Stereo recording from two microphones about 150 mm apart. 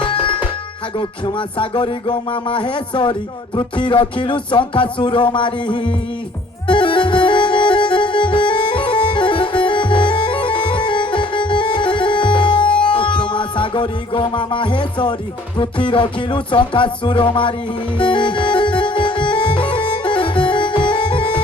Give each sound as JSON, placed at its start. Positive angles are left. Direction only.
{"t": 0.0, "sound": "tabla", "side_deg": 35}
{"t": 0.9, "sound": "music", "side_deg": 35}